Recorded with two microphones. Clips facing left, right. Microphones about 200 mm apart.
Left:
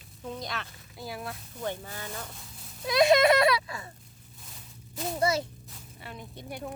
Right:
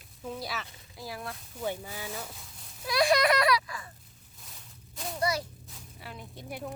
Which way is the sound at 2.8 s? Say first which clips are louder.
Left 4 dB; 20° left (ahead or behind).